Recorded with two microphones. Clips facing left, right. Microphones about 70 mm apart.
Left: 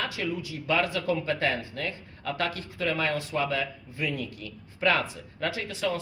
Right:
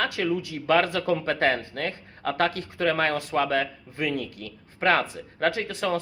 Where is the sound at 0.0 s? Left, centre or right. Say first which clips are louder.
Right 5 dB; right.